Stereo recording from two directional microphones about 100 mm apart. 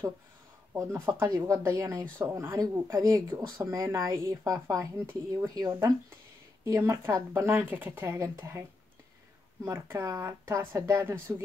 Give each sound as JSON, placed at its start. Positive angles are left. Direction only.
{"t": 0.7, "sound": "speech", "side_deg": -25}
{"t": 9.7, "sound": "speech", "side_deg": -25}